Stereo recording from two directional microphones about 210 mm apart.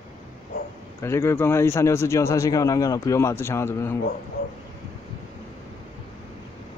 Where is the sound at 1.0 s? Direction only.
10° left (ahead or behind).